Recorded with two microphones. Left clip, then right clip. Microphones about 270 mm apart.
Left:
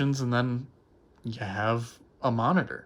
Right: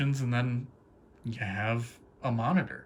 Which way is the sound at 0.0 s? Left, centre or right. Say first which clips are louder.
Left 5 dB; centre.